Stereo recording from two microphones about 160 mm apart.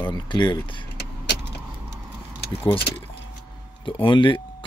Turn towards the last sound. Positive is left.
turn(degrees=30)  # may be behind; listen again after turning